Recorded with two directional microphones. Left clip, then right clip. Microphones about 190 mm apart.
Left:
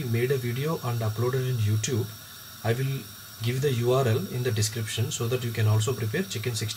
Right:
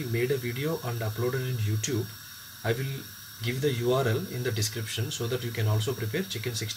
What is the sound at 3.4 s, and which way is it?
Speech, 20° right (ahead or behind).